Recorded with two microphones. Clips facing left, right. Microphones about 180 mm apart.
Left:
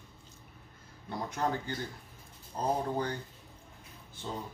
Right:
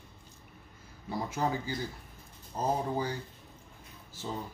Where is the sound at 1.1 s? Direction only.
5° right (ahead or behind).